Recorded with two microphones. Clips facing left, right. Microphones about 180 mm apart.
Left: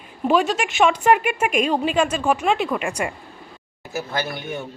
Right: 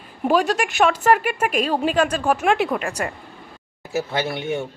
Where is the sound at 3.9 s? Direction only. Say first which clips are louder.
Right 3 dB; 25° right (ahead or behind).